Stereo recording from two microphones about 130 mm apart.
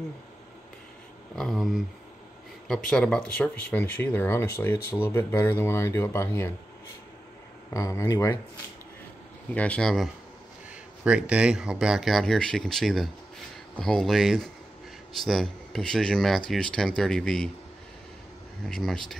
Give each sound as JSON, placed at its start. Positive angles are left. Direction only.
{"t": 1.3, "sound": "speech", "side_deg": 0}
{"t": 7.7, "sound": "speech", "side_deg": 25}
{"t": 9.5, "sound": "speech", "side_deg": 10}
{"t": 11.1, "sound": "speech", "side_deg": -10}
{"t": 18.7, "sound": "speech", "side_deg": 5}